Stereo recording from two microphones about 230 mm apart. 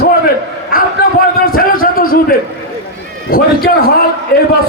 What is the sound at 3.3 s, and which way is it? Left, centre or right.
Speech, left.